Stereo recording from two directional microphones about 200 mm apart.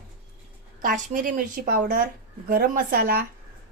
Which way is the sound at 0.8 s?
40° right (ahead or behind).